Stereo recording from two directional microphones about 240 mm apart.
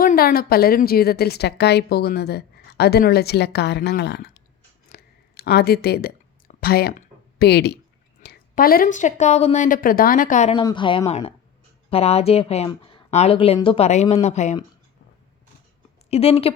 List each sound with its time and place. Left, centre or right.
0.0 s a woman's voice: left
4.9 s a sound: left
5.4 s a woman's voice: left
16.0 s speech: left